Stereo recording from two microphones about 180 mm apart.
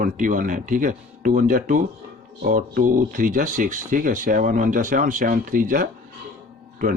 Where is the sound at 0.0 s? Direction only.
50° right (ahead or behind).